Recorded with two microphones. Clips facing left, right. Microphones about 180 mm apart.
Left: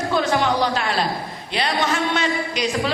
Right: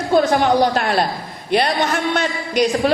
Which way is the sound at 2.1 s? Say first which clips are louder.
Right 3 dB; 55° right (ahead or behind).